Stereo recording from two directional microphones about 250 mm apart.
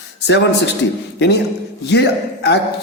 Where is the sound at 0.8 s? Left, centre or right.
Left.